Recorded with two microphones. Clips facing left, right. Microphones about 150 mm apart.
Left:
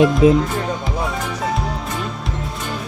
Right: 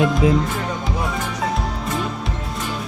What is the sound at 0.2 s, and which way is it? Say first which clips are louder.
Speech: left 5 dB; 20° left (ahead or behind).